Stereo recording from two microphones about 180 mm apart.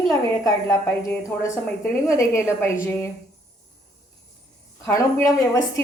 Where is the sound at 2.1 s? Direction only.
15° left (ahead or behind).